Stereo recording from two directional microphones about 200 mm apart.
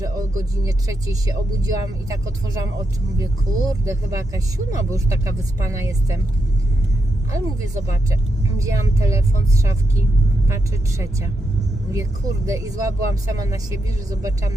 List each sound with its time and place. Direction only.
0.0 s speech: 15° right (ahead or behind)
3.7 s speech: 15° right (ahead or behind)
7.3 s speech: 15° right (ahead or behind)
10.5 s speech: 15° right (ahead or behind)